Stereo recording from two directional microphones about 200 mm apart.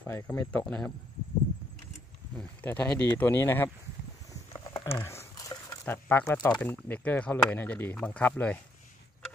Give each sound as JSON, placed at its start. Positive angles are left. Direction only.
{"t": 0.0, "sound": "speech", "side_deg": 10}
{"t": 2.3, "sound": "speech", "side_deg": 10}
{"t": 4.7, "sound": "a sound", "side_deg": 25}
{"t": 5.0, "sound": "speech", "side_deg": 15}